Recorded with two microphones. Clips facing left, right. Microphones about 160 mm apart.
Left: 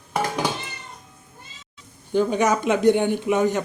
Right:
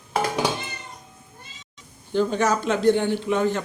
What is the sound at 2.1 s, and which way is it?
A man's voice, 10° left (ahead or behind).